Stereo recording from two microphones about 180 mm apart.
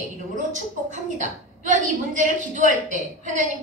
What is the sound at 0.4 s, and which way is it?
A woman's voice, 45° right (ahead or behind).